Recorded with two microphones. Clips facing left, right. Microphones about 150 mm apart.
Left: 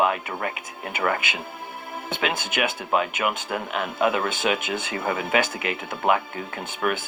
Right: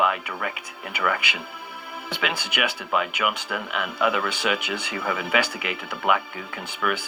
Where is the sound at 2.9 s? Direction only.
35° left (ahead or behind).